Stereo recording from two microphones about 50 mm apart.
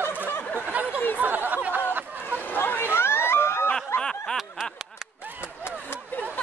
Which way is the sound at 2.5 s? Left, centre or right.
Left.